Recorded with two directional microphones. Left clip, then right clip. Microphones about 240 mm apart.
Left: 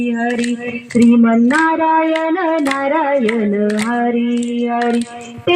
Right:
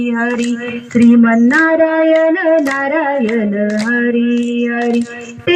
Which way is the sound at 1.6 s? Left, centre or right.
Right.